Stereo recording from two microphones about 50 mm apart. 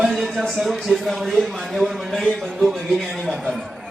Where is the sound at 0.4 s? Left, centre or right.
Centre.